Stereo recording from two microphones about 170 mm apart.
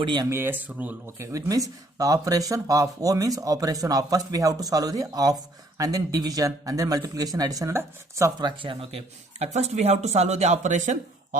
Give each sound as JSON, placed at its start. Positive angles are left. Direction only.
{"t": 0.0, "sound": "speech", "side_deg": -25}
{"t": 0.3, "sound": "speech", "side_deg": -15}
{"t": 9.4, "sound": "speech", "side_deg": -40}